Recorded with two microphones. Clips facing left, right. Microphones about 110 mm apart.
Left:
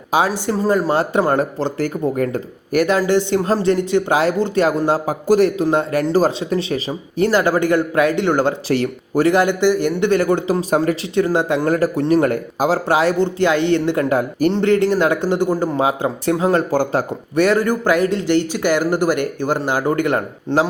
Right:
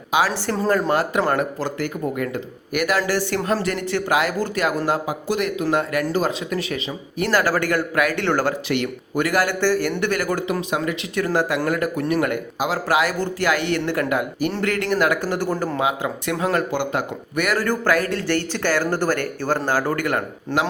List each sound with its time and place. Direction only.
0.1 s speech: 40° left (ahead or behind)
4.9 s speech: 35° left (ahead or behind)
7.3 s speech: 20° left (ahead or behind)
8.6 s speech: 35° left (ahead or behind)
11.1 s speech: 25° left (ahead or behind)
14.1 s speech: 40° left (ahead or behind)
14.5 s speech: 25° left (ahead or behind)
15.8 s speech: 35° left (ahead or behind)
16.7 s a man's voice: 35° left (ahead or behind)